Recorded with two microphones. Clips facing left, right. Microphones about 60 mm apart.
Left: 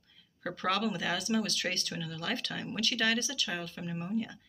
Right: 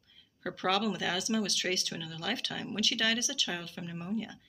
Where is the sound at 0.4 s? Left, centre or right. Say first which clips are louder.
Right 1 dB; left.